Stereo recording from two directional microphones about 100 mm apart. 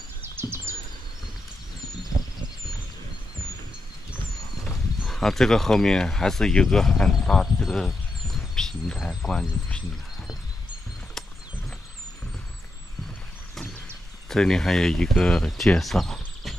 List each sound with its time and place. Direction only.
0.2 s a sound: 25° right (ahead or behind)
4.6 s speech: 5° left (ahead or behind)
14.3 s speech: 5° left (ahead or behind)